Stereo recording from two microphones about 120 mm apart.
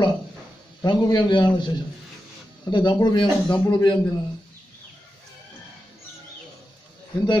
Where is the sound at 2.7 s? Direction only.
35° left (ahead or behind).